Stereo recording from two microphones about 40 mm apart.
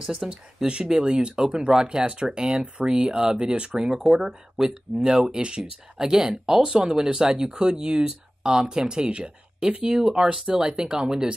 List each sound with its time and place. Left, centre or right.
0.0 s speech: centre
3.9 s speech: centre